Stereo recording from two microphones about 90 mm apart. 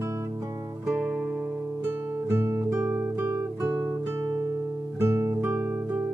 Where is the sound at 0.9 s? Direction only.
10° right (ahead or behind).